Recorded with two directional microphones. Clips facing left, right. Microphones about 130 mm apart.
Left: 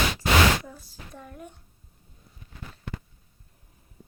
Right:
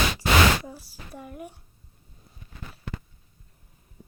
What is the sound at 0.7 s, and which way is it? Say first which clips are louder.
Speech: right 2 dB; 10° right (ahead or behind).